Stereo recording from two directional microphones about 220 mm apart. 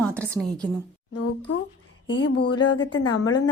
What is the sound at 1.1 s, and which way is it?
Speech, 90° left.